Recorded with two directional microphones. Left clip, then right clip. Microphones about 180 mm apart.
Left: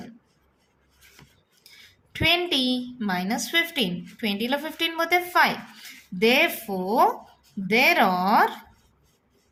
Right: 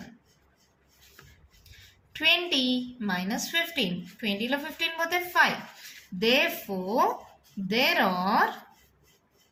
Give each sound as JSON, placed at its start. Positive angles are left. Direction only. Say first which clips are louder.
{"t": 2.1, "sound": "a child's voice", "louder": "left 2 dB", "side_deg": 40}